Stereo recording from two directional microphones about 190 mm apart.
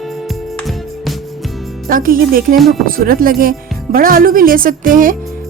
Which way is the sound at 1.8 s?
50° right (ahead or behind).